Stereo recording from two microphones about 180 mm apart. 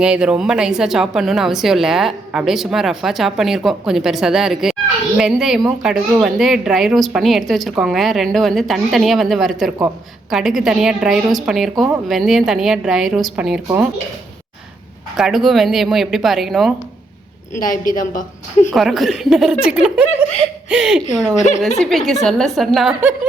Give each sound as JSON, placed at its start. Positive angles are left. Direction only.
{"t": 0.0, "sound": "a woman's voice", "side_deg": -5}
{"t": 15.1, "sound": "a woman's voice", "side_deg": 0}
{"t": 17.5, "sound": "a woman's voice", "side_deg": 50}
{"t": 18.7, "sound": "a woman's voice", "side_deg": 0}